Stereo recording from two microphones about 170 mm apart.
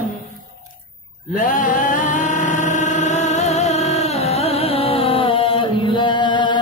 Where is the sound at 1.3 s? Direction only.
50° left (ahead or behind); by 6.5 s 25° left (ahead or behind).